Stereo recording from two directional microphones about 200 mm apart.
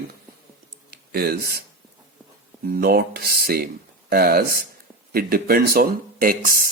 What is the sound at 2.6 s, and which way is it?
Speech, 50° right (ahead or behind).